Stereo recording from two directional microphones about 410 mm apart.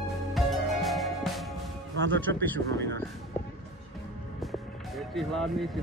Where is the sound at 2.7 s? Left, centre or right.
Right.